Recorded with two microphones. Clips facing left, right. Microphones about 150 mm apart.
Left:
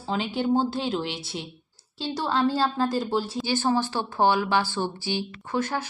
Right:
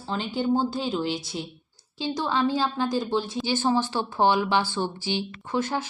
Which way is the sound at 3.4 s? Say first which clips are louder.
Right 1 dB; 15° right (ahead or behind).